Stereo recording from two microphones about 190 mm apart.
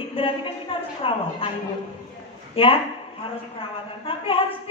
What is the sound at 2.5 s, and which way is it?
Speech, 30° left (ahead or behind).